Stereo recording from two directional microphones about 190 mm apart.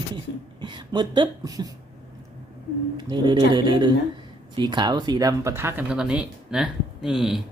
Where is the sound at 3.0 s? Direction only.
25° right (ahead or behind); by 7.4 s centre (ahead or behind).